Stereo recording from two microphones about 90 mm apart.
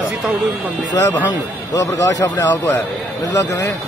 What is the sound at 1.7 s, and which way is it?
Speech, 40° left (ahead or behind).